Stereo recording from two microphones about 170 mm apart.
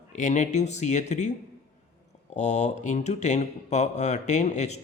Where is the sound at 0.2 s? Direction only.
45° left (ahead or behind).